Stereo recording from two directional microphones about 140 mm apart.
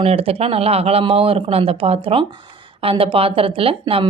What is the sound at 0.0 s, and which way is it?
Speech, 45° right (ahead or behind).